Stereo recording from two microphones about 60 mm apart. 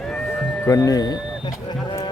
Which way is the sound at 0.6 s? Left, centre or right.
Left.